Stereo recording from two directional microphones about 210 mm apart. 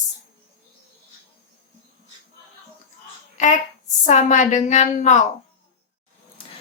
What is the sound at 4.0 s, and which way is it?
A woman's voice, 35° left (ahead or behind).